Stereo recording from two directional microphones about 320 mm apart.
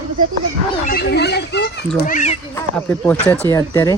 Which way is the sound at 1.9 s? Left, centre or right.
Left.